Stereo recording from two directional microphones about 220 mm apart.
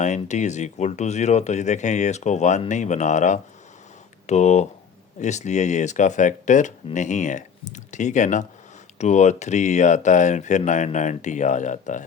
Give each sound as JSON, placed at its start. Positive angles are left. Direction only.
{"t": 0.0, "sound": "speech", "side_deg": 30}